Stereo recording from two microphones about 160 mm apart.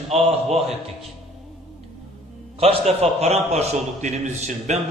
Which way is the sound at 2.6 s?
40° right (ahead or behind).